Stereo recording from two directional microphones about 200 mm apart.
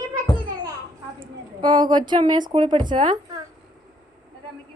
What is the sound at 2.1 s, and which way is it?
Speech, 20° right (ahead or behind).